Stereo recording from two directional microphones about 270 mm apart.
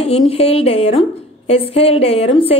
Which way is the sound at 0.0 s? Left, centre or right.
Left.